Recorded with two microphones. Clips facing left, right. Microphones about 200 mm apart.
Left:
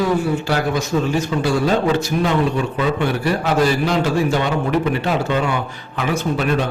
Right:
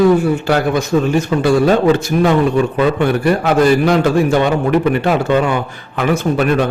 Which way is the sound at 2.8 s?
55° right (ahead or behind).